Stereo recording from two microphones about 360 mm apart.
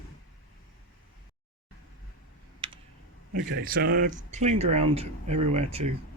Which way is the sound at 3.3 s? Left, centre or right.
Right.